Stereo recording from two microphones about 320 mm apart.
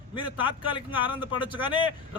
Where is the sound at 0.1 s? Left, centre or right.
Centre.